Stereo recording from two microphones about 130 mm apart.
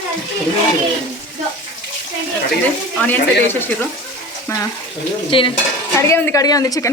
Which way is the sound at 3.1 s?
15° left (ahead or behind).